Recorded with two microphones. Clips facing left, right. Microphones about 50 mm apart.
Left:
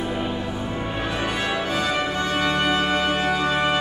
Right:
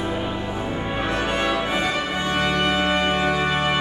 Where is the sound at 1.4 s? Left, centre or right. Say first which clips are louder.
Right 2 dB; right.